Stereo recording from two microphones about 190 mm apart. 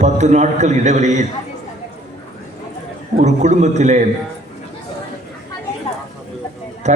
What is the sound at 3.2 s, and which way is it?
Speech, 35° right (ahead or behind).